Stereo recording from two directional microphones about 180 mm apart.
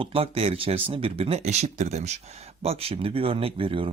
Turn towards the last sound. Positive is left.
turn(degrees=-30)  # may be behind; listen again after turning